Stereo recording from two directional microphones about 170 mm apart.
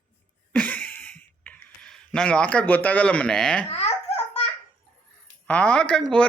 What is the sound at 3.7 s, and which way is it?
Baby laughter, 35° left (ahead or behind).